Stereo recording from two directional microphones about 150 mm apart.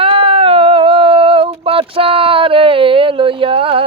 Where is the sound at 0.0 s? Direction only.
35° right (ahead or behind).